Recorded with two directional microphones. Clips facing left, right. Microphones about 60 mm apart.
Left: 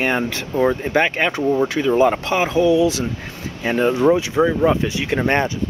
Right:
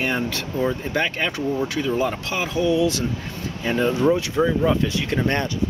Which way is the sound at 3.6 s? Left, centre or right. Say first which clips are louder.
Left 3 dB; left.